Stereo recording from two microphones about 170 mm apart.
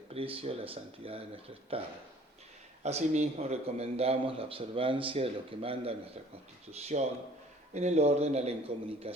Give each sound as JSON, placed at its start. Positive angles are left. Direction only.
{"t": 0.1, "sound": "a man's voice", "side_deg": -35}